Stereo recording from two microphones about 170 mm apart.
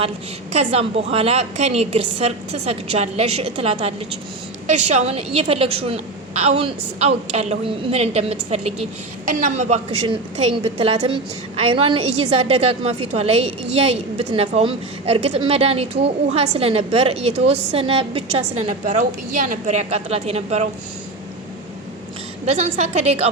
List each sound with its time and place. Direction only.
0.5 s a woman's voice: 40° right (ahead or behind)
10.1 s a woman's voice: 30° right (ahead or behind)
22.4 s a woman's voice: 40° right (ahead or behind)